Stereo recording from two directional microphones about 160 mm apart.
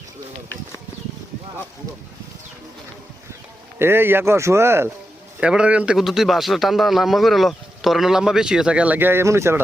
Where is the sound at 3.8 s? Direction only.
15° right (ahead or behind).